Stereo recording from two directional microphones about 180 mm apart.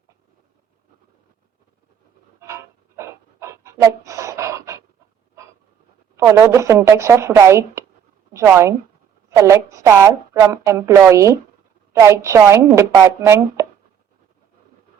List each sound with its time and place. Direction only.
2.4 s pant: 15° right (ahead or behind)
6.1 s a woman's voice: 15° right (ahead or behind)